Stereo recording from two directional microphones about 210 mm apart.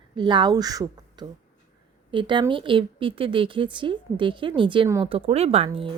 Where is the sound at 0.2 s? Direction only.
20° right (ahead or behind).